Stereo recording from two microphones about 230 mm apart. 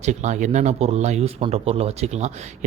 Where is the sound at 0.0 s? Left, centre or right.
Right.